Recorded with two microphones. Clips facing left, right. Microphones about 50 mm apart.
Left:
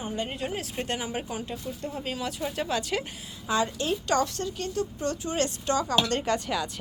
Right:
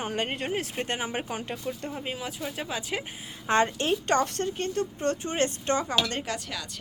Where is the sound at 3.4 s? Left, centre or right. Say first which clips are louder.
Right 3 dB; right.